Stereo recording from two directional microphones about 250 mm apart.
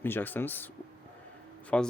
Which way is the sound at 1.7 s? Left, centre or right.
Centre.